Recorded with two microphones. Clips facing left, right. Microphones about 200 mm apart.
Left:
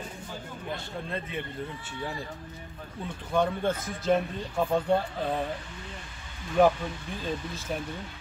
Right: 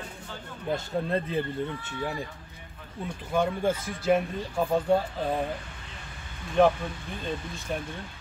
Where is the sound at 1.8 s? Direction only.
20° right (ahead or behind).